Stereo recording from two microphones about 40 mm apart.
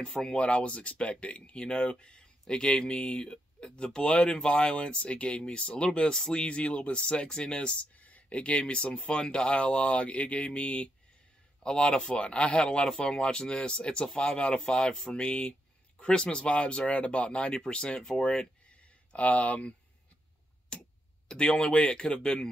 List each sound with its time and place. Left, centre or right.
0.0 s speech: centre
0.4 s speech: left
7.5 s speech: left
20.7 s clock: left
21.3 s speech: centre